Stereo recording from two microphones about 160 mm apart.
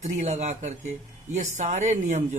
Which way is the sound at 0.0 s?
45° right (ahead or behind).